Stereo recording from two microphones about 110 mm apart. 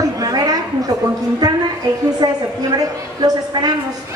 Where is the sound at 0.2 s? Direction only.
35° right (ahead or behind).